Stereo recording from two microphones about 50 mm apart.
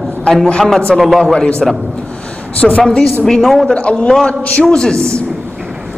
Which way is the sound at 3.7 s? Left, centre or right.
Left.